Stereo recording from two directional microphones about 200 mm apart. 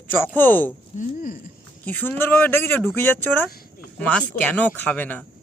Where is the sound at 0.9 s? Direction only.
45° left (ahead or behind).